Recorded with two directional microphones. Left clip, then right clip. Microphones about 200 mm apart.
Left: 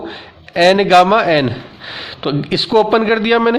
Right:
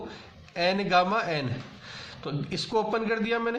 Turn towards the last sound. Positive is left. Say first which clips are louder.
# left 15 dB
turn(degrees=45)  # may be behind; listen again after turning